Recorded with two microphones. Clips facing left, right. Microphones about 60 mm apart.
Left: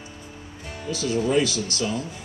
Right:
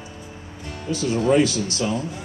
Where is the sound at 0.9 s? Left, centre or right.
Right.